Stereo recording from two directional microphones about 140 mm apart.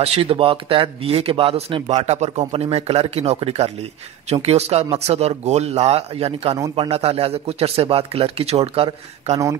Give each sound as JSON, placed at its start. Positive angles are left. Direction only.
{"t": 0.0, "sound": "a man's voice", "side_deg": -45}
{"t": 1.9, "sound": "a man's voice", "side_deg": -55}